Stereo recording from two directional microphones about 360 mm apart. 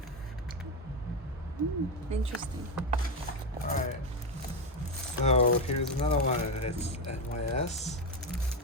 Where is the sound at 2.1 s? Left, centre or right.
Centre.